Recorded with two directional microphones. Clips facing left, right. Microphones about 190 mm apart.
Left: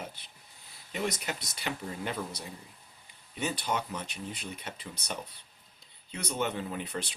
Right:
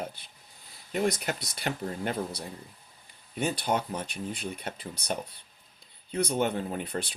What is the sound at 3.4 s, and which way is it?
Speech, 50° right (ahead or behind).